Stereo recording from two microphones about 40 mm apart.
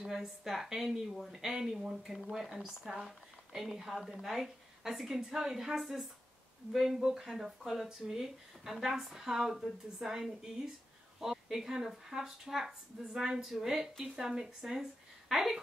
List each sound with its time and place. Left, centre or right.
0.0 s speech: centre